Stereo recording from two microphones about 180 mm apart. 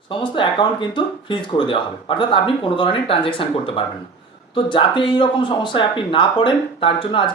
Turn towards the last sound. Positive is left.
turn(degrees=30)  # may be behind; listen again after turning